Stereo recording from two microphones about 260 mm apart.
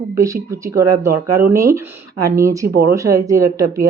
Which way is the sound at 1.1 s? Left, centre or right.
Right.